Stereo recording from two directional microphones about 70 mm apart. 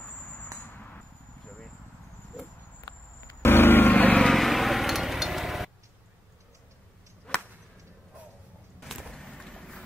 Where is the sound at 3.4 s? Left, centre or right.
Left.